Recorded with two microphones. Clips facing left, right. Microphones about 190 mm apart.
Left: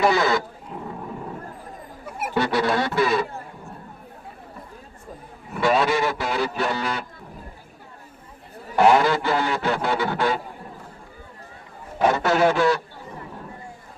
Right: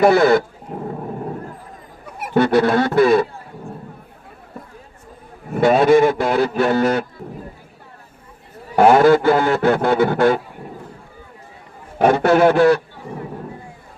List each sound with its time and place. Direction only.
0.0 s a man's voice: 55° right (ahead or behind)
2.3 s a man's voice: 50° right (ahead or behind)
5.5 s a man's voice: 50° right (ahead or behind)
8.7 s a man's voice: 50° right (ahead or behind)
11.9 s a man's voice: 55° right (ahead or behind)